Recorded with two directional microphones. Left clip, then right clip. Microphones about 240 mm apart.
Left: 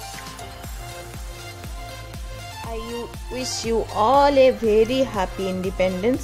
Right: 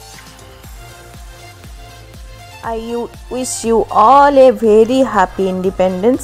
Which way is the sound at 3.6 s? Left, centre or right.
Centre.